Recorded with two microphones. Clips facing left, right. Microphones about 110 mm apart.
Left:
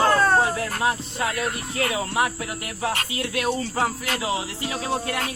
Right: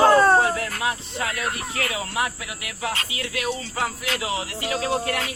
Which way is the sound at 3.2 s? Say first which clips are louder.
Left 4 dB; 45° left (ahead or behind).